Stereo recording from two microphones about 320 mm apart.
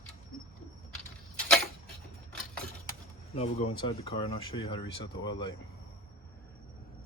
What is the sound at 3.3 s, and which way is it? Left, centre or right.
Speech, centre.